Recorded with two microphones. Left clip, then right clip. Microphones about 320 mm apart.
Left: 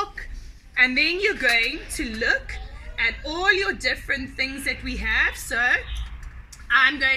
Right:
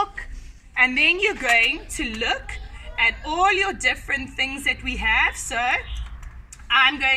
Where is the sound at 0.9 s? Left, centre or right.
Right.